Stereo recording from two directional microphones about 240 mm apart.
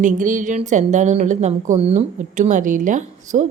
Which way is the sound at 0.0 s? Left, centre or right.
Right.